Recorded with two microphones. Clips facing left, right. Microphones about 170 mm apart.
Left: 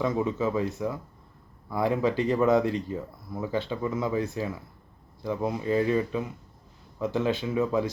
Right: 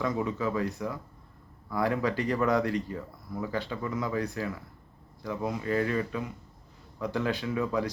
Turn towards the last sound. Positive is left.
turn(degrees=25)  # may be behind; listen again after turning